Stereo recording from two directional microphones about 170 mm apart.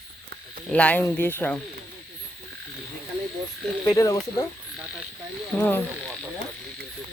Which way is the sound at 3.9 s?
20° left (ahead or behind).